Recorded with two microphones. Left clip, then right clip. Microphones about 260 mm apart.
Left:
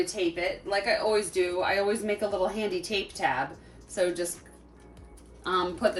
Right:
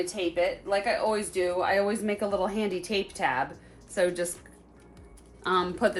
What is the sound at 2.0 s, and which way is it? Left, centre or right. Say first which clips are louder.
Speech: even; centre.